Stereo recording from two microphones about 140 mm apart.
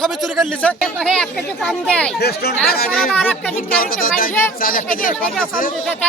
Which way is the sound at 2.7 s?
90° left.